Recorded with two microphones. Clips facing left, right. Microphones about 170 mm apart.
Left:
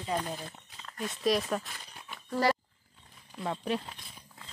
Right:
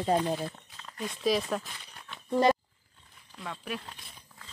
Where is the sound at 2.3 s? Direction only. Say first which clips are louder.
Right 4 dB; 20° right (ahead or behind).